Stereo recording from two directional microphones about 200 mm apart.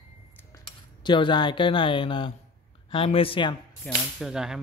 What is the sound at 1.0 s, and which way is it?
Speech, 25° left (ahead or behind).